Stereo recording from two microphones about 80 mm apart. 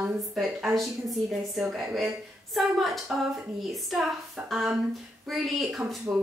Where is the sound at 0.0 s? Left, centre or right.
Centre.